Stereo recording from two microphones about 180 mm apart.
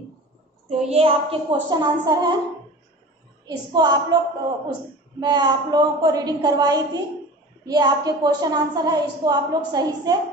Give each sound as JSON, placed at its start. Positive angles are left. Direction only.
{"t": 0.7, "sound": "a woman's voice", "side_deg": -35}
{"t": 3.4, "sound": "a woman's voice", "side_deg": -20}
{"t": 5.2, "sound": "a woman's voice", "side_deg": -20}